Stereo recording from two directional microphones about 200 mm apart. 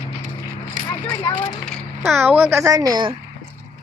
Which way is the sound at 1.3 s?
20° left (ahead or behind).